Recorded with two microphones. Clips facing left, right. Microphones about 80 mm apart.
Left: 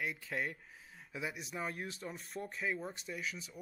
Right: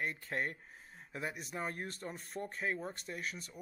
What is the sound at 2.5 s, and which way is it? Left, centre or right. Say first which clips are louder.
Speech: even; right.